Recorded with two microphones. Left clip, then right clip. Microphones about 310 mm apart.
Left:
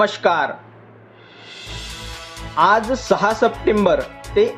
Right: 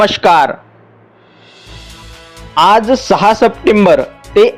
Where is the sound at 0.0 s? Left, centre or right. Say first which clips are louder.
Right 8 dB; right.